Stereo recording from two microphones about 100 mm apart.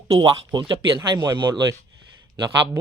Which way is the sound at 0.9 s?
35° right (ahead or behind).